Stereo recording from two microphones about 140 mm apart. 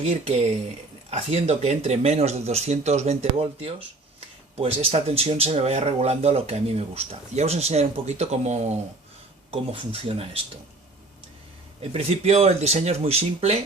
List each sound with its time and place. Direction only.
0.0 s speech: 50° right (ahead or behind)
11.8 s speech: 45° right (ahead or behind)